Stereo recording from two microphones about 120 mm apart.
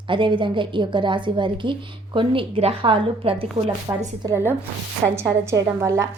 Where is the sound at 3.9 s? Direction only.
30° right (ahead or behind).